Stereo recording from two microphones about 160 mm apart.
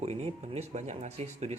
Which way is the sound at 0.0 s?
45° right (ahead or behind).